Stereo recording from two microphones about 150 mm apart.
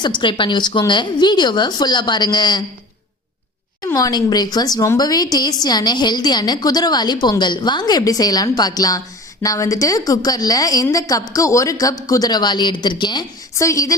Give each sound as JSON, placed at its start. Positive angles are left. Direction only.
{"t": 0.2, "sound": "speech", "side_deg": 35}
{"t": 3.8, "sound": "a woman's voice", "side_deg": 25}